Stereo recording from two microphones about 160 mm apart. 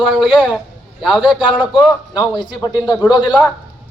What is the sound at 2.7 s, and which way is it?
Speech, 25° left (ahead or behind).